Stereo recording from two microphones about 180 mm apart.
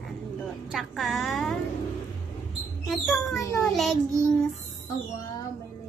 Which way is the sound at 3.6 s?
Centre (ahead or behind).